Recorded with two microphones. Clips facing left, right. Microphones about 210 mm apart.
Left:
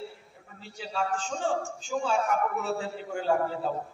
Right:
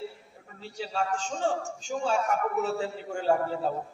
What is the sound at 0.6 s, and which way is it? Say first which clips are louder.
A man's voice: right 1 dB; 40° right (ahead or behind).